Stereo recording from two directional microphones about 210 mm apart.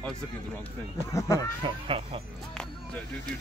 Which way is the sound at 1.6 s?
25° right (ahead or behind).